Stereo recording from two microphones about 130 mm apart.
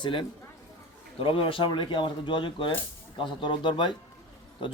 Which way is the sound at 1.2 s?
45° left (ahead or behind).